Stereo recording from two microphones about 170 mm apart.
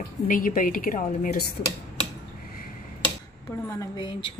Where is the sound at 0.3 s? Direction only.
55° left (ahead or behind).